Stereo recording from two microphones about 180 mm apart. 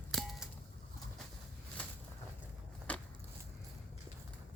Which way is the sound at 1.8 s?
5° left (ahead or behind).